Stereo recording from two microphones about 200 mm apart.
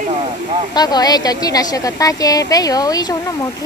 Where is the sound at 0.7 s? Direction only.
20° left (ahead or behind).